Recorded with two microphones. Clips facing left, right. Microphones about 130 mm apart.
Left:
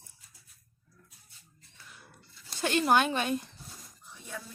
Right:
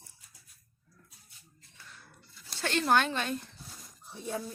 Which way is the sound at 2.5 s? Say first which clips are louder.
Left 2 dB; 15° left (ahead or behind).